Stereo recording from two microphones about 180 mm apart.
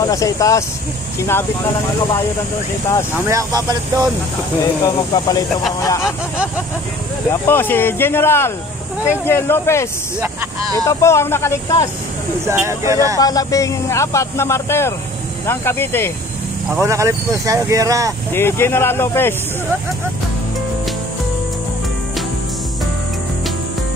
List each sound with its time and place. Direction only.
0.0 s speech: 20° left (ahead or behind)
3.3 s speech: 20° right (ahead or behind)
4.6 s speech: 20° left (ahead or behind)
7.2 s speech: 10° left (ahead or behind)
10.9 s speech: 15° left (ahead or behind)
12.4 s speech: 15° right (ahead or behind)
13.2 s speech: 20° left (ahead or behind)
16.7 s speech: 15° right (ahead or behind)
18.3 s speech: 15° left (ahead or behind)